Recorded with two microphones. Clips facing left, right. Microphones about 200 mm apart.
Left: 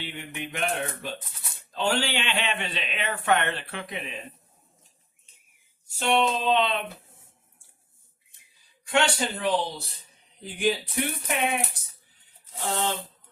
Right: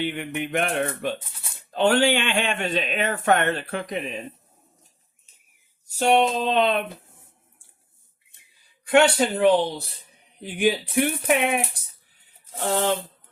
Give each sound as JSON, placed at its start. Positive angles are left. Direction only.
{"t": 0.0, "sound": "a man's voice", "side_deg": -55}
{"t": 5.9, "sound": "a man's voice", "side_deg": -40}
{"t": 8.9, "sound": "a man's voice", "side_deg": -60}